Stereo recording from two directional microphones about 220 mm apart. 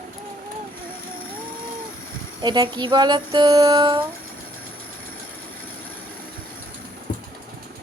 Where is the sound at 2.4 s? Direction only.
20° right (ahead or behind).